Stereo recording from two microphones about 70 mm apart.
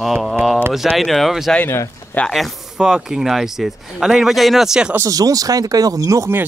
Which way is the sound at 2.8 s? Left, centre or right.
Centre.